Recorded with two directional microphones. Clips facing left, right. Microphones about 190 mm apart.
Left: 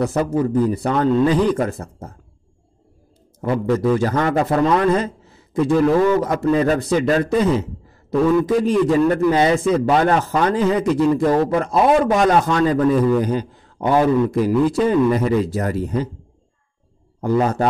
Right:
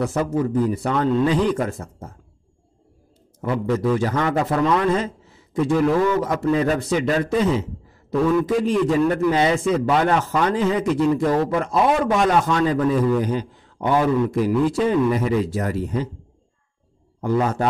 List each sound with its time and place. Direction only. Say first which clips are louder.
0.0 s a man's voice: left 3 dB; 35° left (ahead or behind)
3.3 s a man's voice: left 3 dB; 35° left (ahead or behind)
8.6 s a man's voice: left 3 dB; 40° left (ahead or behind)
17.2 s a man's voice: left 3 dB; 35° left (ahead or behind)